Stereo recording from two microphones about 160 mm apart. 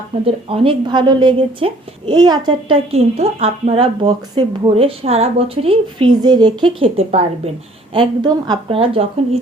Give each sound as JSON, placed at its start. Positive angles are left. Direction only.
{"t": 0.3, "sound": "a woman's voice", "side_deg": -35}
{"t": 7.9, "sound": "a woman's voice", "side_deg": -25}